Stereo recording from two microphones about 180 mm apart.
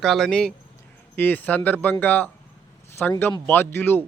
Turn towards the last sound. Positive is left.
turn(degrees=10)  # may be behind; listen again after turning